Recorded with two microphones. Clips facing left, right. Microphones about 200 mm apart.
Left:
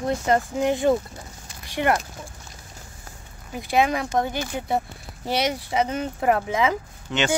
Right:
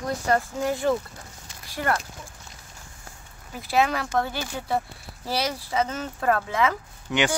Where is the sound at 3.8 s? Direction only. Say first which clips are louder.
Left 2 dB; 15° left (ahead or behind).